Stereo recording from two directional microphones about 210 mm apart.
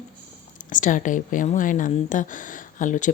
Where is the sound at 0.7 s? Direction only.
35° left (ahead or behind).